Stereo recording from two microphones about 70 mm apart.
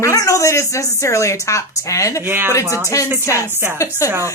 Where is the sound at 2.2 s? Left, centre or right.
Right.